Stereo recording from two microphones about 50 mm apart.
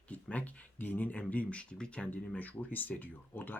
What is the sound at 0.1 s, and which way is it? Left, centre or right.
Speech, left.